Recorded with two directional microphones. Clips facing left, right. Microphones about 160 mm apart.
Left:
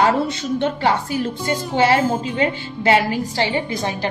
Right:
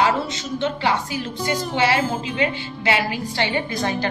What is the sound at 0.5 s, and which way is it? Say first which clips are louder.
A woman's voice: left 2 dB; 50° left (ahead or behind).